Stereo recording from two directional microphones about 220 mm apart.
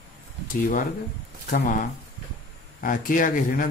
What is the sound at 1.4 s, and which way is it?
Speech, 35° left (ahead or behind).